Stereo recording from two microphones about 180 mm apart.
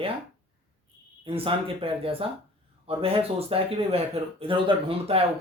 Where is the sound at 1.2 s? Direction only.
30° right (ahead or behind).